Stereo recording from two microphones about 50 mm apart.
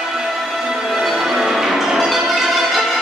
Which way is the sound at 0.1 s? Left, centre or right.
Centre.